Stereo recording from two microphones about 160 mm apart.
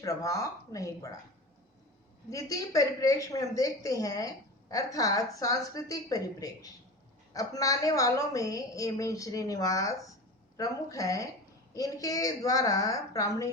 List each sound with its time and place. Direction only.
0.0 s a woman's voice: 20° left (ahead or behind)
2.3 s a woman's voice: 20° left (ahead or behind)